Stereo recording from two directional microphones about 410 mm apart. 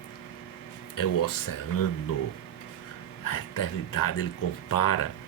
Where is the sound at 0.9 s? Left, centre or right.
Left.